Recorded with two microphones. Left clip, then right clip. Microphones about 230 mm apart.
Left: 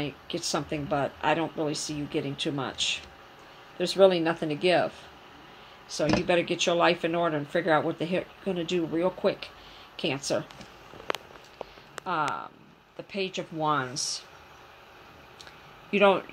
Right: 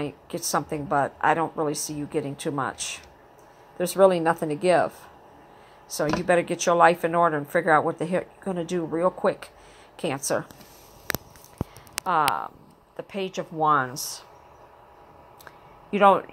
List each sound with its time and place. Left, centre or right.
0.0 s speech: right
12.0 s speech: right
15.9 s speech: centre